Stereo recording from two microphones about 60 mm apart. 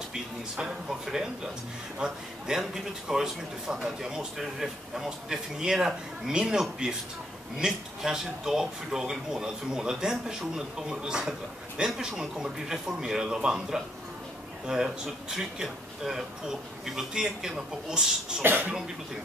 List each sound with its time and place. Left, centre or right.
0.1 s speech: centre
18.4 s speech: right